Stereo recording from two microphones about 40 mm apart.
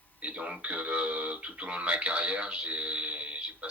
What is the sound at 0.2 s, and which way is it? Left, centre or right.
Speech, right.